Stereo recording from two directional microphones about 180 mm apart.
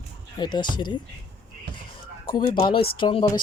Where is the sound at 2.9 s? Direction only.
25° left (ahead or behind).